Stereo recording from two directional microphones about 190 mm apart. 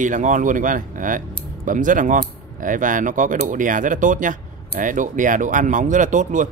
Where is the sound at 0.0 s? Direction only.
40° right (ahead or behind).